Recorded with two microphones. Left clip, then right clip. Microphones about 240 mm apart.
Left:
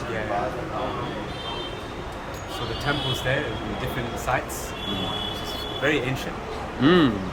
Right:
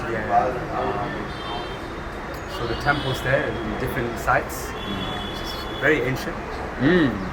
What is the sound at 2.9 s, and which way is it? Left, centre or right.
Speech, centre.